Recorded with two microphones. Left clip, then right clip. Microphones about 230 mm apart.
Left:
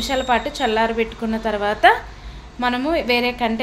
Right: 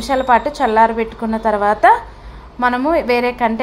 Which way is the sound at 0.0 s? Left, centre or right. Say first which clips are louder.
Right 6 dB; centre.